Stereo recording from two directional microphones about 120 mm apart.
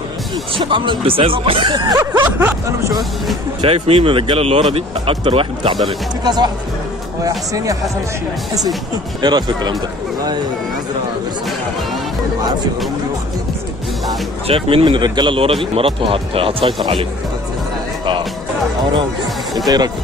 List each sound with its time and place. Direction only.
0.6 s speech: 45° right (ahead or behind)
1.7 s speech: 35° right (ahead or behind)
2.1 s a sound: 15° right (ahead or behind)
3.6 s speech: 55° right (ahead or behind)
5.9 s speech: 35° right (ahead or behind)
9.2 s speech: 35° right (ahead or behind)
14.5 s speech: 50° right (ahead or behind)